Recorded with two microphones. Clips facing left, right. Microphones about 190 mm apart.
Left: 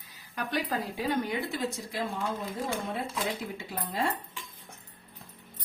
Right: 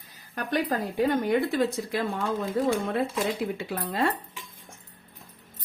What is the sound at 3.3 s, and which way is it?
Speech, 70° right (ahead or behind).